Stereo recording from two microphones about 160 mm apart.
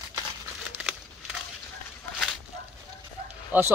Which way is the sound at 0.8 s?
5° right (ahead or behind).